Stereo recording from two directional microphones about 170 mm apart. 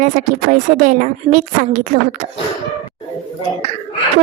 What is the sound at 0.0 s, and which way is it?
A woman's voice, 50° right (ahead or behind).